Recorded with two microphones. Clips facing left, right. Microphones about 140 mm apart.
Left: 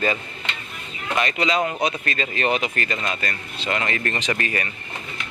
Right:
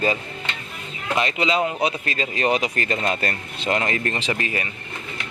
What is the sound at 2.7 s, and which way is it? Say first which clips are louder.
Speech: right 3 dB; 30° right (ahead or behind).